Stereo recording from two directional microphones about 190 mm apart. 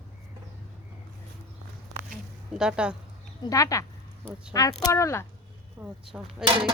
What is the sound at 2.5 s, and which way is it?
Speech, 5° right (ahead or behind).